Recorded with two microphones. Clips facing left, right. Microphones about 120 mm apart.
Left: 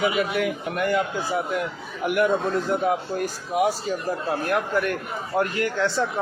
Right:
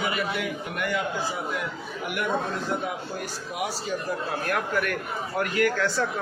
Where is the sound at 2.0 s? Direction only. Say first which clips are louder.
Left 9 dB; 50° left (ahead or behind).